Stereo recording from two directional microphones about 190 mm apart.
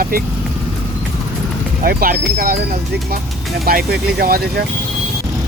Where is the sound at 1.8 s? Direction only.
50° right (ahead or behind).